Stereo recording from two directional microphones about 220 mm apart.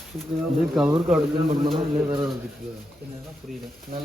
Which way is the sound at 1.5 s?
25° right (ahead or behind).